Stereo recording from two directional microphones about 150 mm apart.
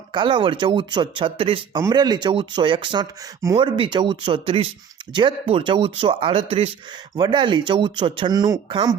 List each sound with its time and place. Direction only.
0.1 s speech: 30° right (ahead or behind)